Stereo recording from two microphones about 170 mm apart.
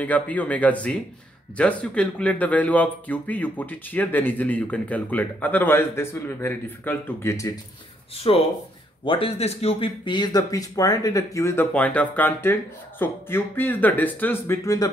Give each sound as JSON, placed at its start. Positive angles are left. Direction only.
{"t": 0.0, "sound": "speech", "side_deg": 10}
{"t": 8.2, "sound": "speech", "side_deg": 35}